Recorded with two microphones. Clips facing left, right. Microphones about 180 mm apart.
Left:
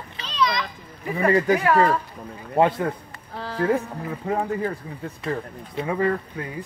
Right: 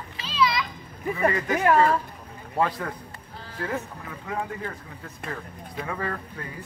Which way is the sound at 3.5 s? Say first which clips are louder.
Left 8 dB; 35° left (ahead or behind).